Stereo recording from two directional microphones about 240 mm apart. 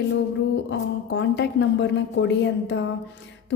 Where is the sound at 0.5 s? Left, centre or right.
Left.